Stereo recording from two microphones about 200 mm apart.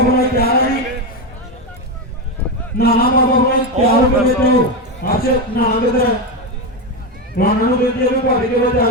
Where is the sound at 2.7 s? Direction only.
50° left (ahead or behind).